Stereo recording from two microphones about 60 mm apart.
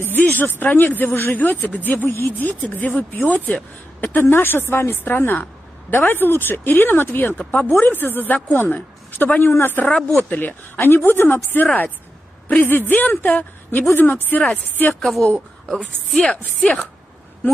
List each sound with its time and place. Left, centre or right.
0.0 s speech: left
4.1 s speech: left
9.8 s a woman's voice: centre
10.4 s speech: left
15.0 s a woman's voice: centre